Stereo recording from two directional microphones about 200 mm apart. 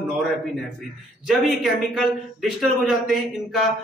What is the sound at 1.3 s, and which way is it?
A man's voice, centre (ahead or behind).